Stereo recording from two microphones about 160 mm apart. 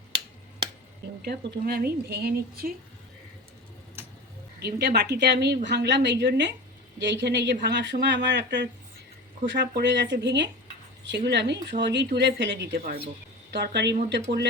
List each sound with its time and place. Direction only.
1.2 s speech: 80° right
4.6 s speech: 90° right